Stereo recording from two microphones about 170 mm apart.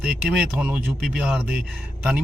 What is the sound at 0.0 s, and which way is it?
A man's voice, 5° right (ahead or behind).